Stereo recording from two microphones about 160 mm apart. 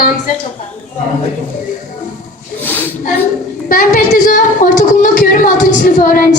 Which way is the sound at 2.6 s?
10° left (ahead or behind).